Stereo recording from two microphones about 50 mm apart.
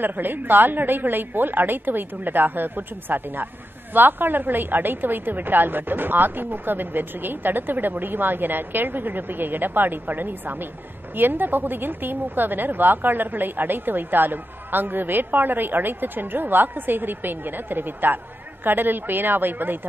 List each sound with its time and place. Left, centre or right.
0.0 s a woman's voice: right